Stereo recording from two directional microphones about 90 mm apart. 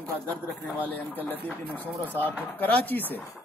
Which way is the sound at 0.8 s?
20° left (ahead or behind).